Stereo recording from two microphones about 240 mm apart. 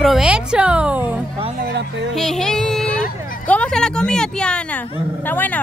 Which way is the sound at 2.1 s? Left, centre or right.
Centre.